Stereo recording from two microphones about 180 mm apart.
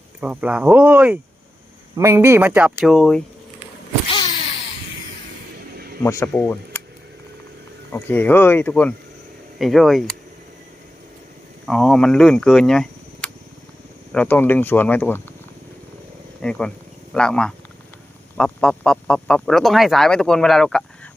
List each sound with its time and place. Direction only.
0.2 s speech: 5° right (ahead or behind)
4.1 s power windows: 25° left (ahead or behind)
6.0 s speech: 15° left (ahead or behind)
7.9 s speech: 10° left (ahead or behind)
11.6 s speech: centre (ahead or behind)
16.4 s speech: 5° left (ahead or behind)